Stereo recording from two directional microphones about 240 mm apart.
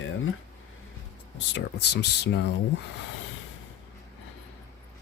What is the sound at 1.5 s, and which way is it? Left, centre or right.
Speech, left.